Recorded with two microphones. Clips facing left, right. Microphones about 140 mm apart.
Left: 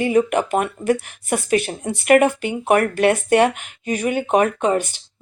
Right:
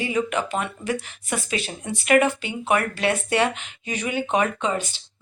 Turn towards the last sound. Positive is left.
turn(degrees=50)  # may be behind; listen again after turning